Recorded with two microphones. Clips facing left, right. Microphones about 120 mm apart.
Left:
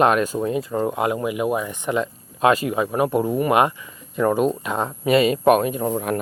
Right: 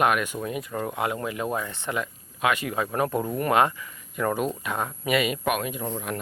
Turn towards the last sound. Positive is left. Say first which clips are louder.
# left 8 dB
turn(degrees=50)  # may be behind; listen again after turning